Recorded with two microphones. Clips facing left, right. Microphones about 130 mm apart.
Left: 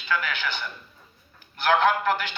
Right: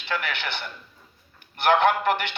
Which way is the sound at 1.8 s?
65° right (ahead or behind).